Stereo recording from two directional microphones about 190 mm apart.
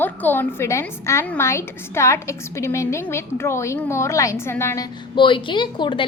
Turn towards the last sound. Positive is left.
turn(degrees=25)  # may be behind; listen again after turning